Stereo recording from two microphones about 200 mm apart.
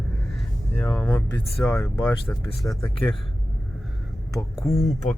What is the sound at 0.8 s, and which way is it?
Speech, 10° left (ahead or behind).